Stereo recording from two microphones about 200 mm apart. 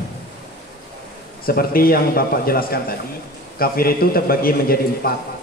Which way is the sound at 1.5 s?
50° left (ahead or behind).